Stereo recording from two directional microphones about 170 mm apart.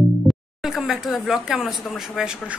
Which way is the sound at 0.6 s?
5° right (ahead or behind).